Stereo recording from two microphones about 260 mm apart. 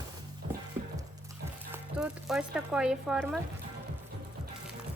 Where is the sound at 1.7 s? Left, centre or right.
Centre.